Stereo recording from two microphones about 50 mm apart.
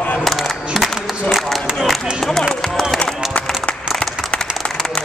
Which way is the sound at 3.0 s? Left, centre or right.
Left.